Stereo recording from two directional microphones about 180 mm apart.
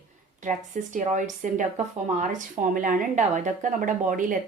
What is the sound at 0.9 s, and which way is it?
A woman's voice, 45° right (ahead or behind).